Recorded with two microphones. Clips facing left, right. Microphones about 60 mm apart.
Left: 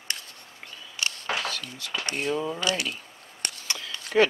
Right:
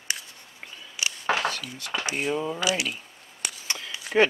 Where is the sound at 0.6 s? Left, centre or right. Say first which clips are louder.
Even; centre.